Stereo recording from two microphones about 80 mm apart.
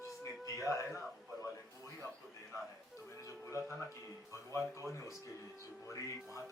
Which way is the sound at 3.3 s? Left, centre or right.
Left.